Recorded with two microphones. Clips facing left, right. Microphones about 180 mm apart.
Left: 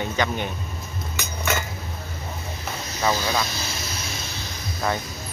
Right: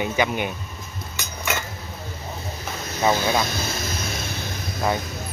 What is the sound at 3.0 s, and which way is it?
Speech, 20° right (ahead or behind).